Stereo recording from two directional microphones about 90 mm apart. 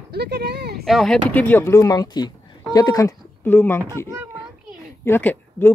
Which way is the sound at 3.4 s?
20° left (ahead or behind).